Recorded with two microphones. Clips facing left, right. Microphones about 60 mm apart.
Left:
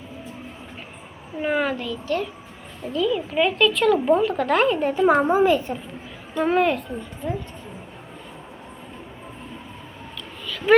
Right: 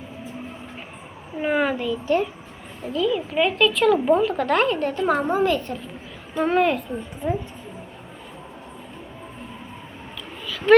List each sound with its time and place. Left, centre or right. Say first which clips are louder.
1.4 s a child's voice: right 1 dB; centre
2.8 s speech: even; centre
6.3 s speech: even; centre
7.2 s a child's voice: right 3 dB; centre
10.4 s a sound: right 2 dB; centre